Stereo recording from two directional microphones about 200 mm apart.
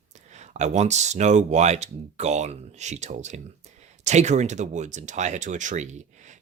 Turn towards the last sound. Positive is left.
turn(degrees=-35)  # may be behind; listen again after turning